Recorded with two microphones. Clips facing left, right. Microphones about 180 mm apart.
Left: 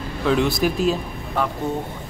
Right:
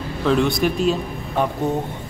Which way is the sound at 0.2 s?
Centre (ahead or behind).